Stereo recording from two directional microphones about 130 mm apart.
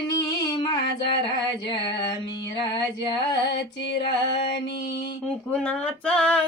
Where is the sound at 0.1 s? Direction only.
35° left (ahead or behind).